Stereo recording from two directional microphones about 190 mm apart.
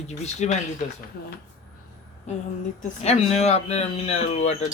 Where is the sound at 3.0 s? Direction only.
35° left (ahead or behind).